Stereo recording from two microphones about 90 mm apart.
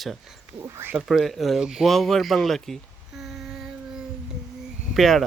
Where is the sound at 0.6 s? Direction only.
25° right (ahead or behind).